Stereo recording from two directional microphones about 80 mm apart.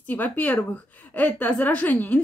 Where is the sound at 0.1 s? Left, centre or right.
Centre.